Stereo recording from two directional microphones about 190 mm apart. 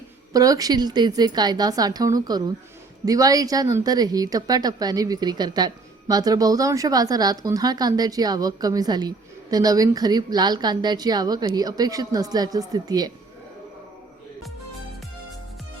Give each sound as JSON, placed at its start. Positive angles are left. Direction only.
{"t": 0.3, "sound": "a woman's voice", "side_deg": -20}